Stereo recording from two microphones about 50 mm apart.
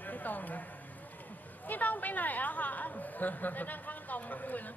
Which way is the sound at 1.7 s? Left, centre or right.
Left.